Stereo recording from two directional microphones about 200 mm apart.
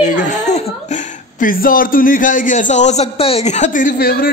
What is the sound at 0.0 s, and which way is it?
Chuckle, 35° left (ahead or behind).